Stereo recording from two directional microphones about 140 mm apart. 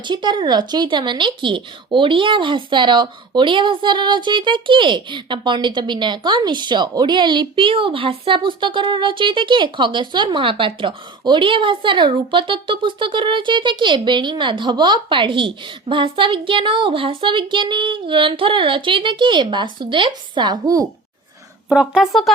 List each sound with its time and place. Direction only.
0.1 s speech: 35° right (ahead or behind)
21.7 s speech: 5° right (ahead or behind)